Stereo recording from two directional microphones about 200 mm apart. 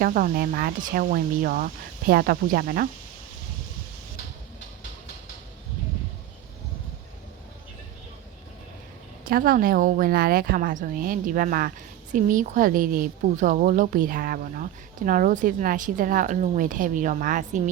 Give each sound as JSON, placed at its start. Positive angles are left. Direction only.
{"t": 0.0, "sound": "speech", "side_deg": -45}
{"t": 9.3, "sound": "a woman's voice", "side_deg": -45}